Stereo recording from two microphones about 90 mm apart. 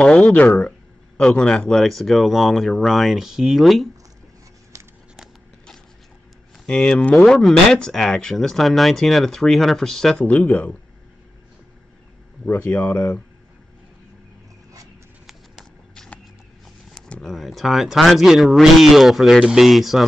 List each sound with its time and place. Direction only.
0.0 s speech: 10° left (ahead or behind)
5.1 s a sound: centre (ahead or behind)
6.6 s speech: 10° left (ahead or behind)
7.2 s speech: centre (ahead or behind)
10.2 s speech: 15° left (ahead or behind)
12.4 s speech: 20° left (ahead or behind)
15.9 s a sound: 10° left (ahead or behind)
16.9 s speech: 5° left (ahead or behind)